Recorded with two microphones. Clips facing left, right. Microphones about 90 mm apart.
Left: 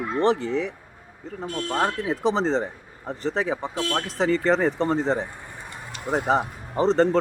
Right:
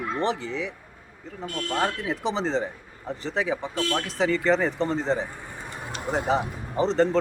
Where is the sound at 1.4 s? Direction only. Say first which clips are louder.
Left 2 dB; 20° left (ahead or behind).